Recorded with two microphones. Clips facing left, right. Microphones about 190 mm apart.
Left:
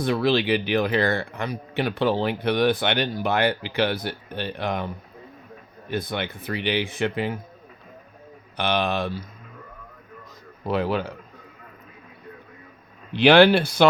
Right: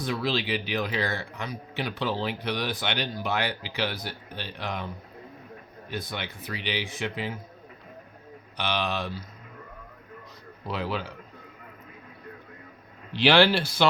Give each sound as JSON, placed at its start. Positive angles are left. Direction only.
{"t": 0.0, "sound": "speech", "side_deg": 60}
{"t": 5.9, "sound": "speech", "side_deg": 55}
{"t": 8.5, "sound": "speech", "side_deg": 55}
{"t": 10.7, "sound": "speech", "side_deg": 50}
{"t": 13.1, "sound": "speech", "side_deg": 60}